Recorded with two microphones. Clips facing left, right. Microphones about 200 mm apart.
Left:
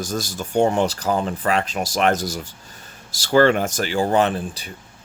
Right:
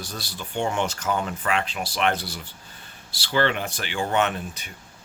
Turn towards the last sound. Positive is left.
turn(degrees=35)  # may be behind; listen again after turning